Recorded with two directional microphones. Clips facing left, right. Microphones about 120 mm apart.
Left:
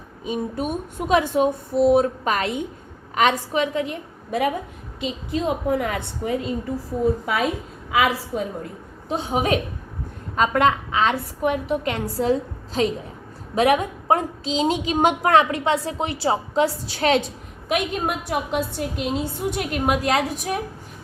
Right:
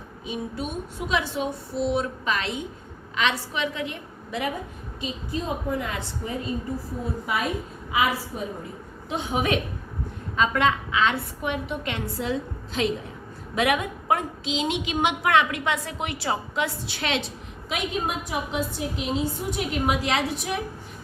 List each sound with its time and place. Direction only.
0.3 s speech: 50° left (ahead or behind)
5.3 s a woman's voice: 70° left (ahead or behind)
7.9 s a woman's voice: 90° left
9.0 s a woman's voice: 35° left (ahead or behind)
10.3 s a woman's voice: 45° left (ahead or behind)